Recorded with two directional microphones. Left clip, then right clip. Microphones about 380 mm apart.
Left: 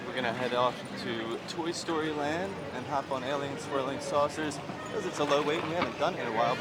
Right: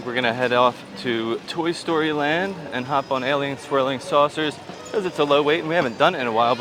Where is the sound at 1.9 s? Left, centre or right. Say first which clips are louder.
Right 11 dB; right.